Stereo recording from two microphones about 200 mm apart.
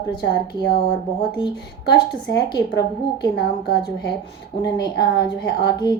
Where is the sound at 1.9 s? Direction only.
55° left (ahead or behind).